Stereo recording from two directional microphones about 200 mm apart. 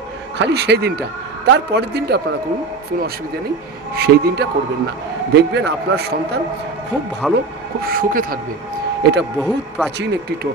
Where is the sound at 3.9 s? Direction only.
50° right (ahead or behind).